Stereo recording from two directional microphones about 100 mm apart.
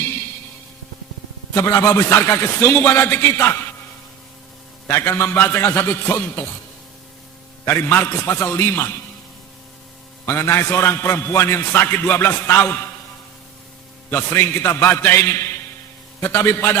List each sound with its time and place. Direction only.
1.5 s a man's voice: 25° left (ahead or behind)
4.9 s a man's voice: 25° left (ahead or behind)
7.6 s a man's voice: 25° left (ahead or behind)
10.2 s a man's voice: 25° left (ahead or behind)
14.1 s a man's voice: 20° left (ahead or behind)